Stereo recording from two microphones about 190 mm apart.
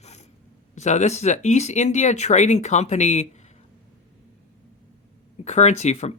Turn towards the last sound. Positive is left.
turn(degrees=35)  # may be behind; listen again after turning